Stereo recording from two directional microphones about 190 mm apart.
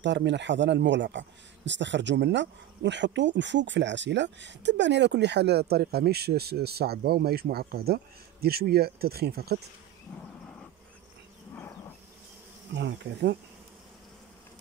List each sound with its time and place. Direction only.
0.0 s speech: 65° right (ahead or behind)
12.7 s speech: 65° right (ahead or behind)